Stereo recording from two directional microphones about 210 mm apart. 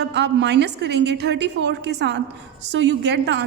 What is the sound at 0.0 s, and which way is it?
A woman's voice, 55° right (ahead or behind).